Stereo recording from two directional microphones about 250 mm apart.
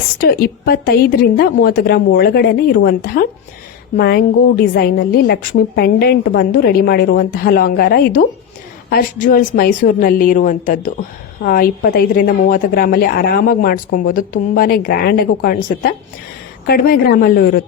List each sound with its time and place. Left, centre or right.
0.2 s a woman's voice: left